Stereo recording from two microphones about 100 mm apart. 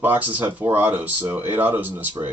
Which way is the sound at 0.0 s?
20° right (ahead or behind).